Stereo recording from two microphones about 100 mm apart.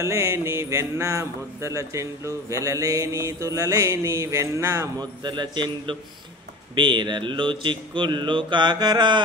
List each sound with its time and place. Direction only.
0.0 s a man's voice: 25° right (ahead or behind)
5.2 s speech: 50° right (ahead or behind)